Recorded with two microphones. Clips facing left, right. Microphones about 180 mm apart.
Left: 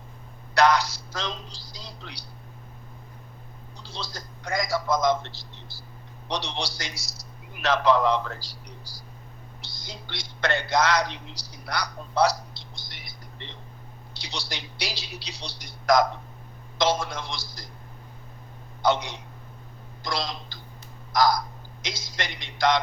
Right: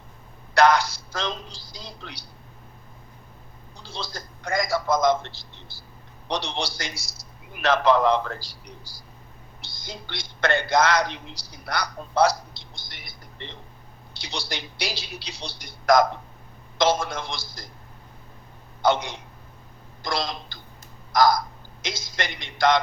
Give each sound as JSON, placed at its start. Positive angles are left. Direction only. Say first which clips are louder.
{"t": 0.5, "sound": "speech", "louder": "right 2 dB", "side_deg": -50}
{"t": 3.8, "sound": "speech", "louder": "right 2 dB", "side_deg": -50}
{"t": 6.2, "sound": "speech", "louder": "right 2 dB", "side_deg": -50}
{"t": 9.8, "sound": "a man's voice", "louder": "right 3 dB", "side_deg": -50}
{"t": 12.9, "sound": "television", "louder": "even", "side_deg": -50}
{"t": 14.2, "sound": "speech", "louder": "right 3 dB", "side_deg": -50}
{"t": 18.8, "sound": "a man's voice", "louder": "right 2 dB", "side_deg": -50}